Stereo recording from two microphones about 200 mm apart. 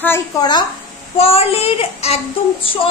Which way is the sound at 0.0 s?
15° left (ahead or behind).